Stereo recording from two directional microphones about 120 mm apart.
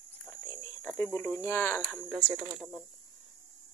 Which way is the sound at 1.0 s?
15° left (ahead or behind).